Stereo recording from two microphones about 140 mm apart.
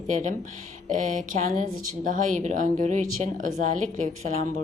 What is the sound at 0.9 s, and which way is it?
Speech, 65° right (ahead or behind).